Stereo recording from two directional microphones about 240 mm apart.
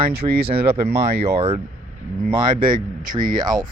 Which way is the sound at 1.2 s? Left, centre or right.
Right.